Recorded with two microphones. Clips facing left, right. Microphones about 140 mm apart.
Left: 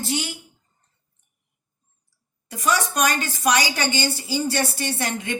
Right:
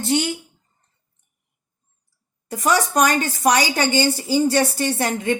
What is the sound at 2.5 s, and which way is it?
A woman's voice, 45° right (ahead or behind).